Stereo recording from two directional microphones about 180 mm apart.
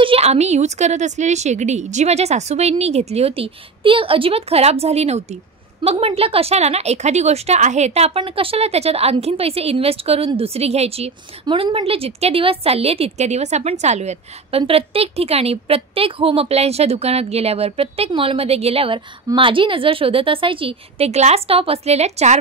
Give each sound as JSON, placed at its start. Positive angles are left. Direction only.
{"t": 0.0, "sound": "a woman's voice", "side_deg": -35}